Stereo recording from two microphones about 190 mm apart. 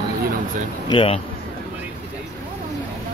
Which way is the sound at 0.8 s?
25° left (ahead or behind).